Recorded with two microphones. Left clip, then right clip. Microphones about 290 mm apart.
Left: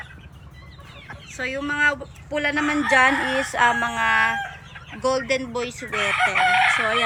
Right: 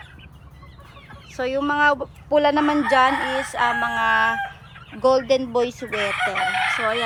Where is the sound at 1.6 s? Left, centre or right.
Centre.